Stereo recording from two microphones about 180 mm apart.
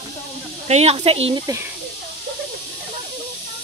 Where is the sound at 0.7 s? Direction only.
35° right (ahead or behind).